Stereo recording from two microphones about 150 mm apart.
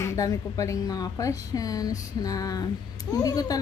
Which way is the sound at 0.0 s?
20° left (ahead or behind).